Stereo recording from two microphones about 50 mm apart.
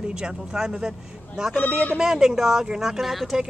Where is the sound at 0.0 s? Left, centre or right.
Centre.